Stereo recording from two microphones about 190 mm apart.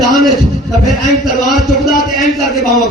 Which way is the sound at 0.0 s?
Centre (ahead or behind).